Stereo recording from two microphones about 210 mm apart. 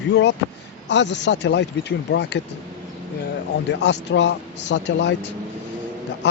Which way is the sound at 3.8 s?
55° left (ahead or behind).